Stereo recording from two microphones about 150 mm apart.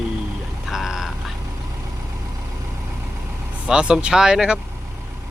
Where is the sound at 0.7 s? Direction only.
Centre (ahead or behind).